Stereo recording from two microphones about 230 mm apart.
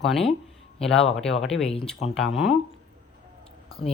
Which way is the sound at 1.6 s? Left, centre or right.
Left.